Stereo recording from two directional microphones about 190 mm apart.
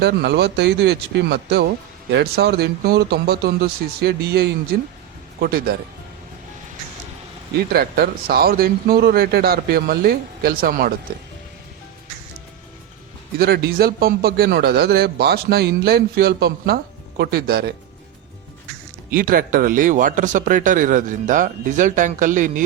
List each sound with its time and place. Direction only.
0.0 s a man's voice: 60° right (ahead or behind)
7.7 s speech: 55° right (ahead or behind)
13.4 s a man's voice: 55° right (ahead or behind)
19.1 s speech: 45° right (ahead or behind)